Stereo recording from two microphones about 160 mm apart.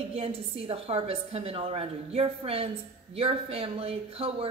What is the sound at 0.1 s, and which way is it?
Speech, 40° right (ahead or behind).